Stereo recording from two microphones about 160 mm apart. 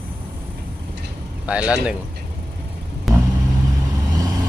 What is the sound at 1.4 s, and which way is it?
Speech, 5° right (ahead or behind).